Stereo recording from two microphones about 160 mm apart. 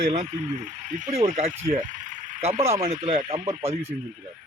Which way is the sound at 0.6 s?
55° right (ahead or behind).